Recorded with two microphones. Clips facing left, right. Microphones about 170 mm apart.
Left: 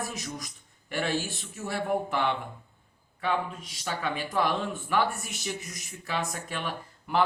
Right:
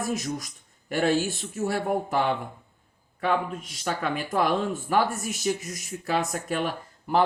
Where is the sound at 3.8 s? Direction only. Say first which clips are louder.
Right 3 dB; 45° right (ahead or behind).